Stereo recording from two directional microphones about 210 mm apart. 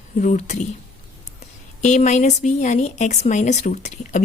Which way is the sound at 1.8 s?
35° left (ahead or behind).